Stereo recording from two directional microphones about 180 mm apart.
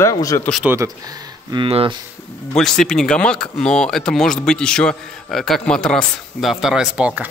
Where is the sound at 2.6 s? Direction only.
5° left (ahead or behind).